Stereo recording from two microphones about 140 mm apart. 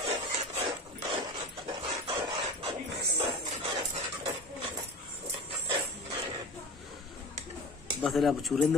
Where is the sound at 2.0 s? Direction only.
40° right (ahead or behind).